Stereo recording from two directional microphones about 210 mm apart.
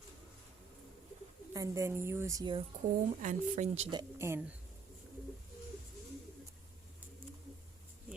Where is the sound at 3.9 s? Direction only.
10° right (ahead or behind).